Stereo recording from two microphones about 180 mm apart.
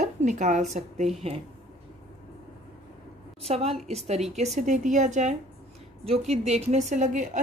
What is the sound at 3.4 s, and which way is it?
A woman's voice, 35° right (ahead or behind).